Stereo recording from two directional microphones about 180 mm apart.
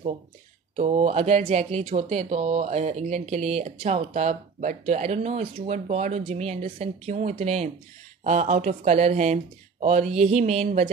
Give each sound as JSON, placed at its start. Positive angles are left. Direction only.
{"t": 0.7, "sound": "speech", "side_deg": -35}